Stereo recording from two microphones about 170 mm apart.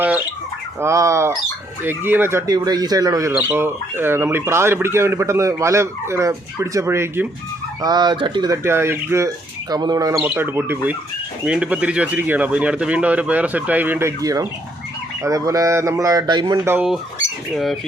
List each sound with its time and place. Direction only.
0.8 s speech: 15° right (ahead or behind)
8.6 s speech: 15° right (ahead or behind)
16.6 s speech: 5° right (ahead or behind)